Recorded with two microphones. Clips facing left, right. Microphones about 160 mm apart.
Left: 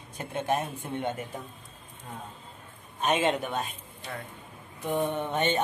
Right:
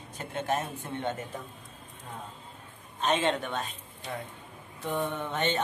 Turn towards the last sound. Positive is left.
turn(degrees=15)  # may be behind; listen again after turning